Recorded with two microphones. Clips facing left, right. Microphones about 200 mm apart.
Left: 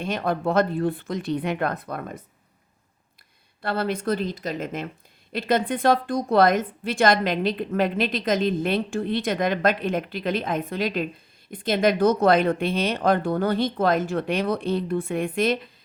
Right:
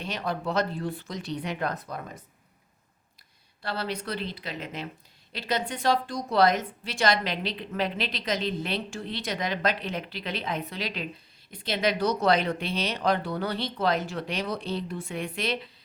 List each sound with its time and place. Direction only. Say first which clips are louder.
0.0 s speech: left 6 dB; 50° left (ahead or behind)
3.6 s a woman's voice: left 6 dB; 55° left (ahead or behind)